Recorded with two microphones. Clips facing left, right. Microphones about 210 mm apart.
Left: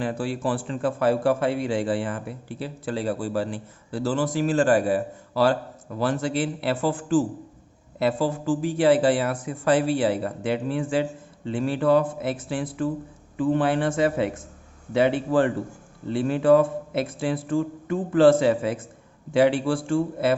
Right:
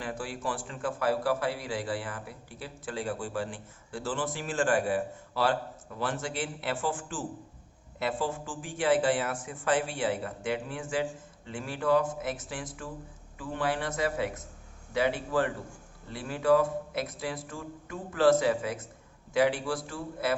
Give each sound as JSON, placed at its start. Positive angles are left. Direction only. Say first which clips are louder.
{"t": 0.0, "sound": "a man's voice", "louder": "left 9 dB", "side_deg": 30}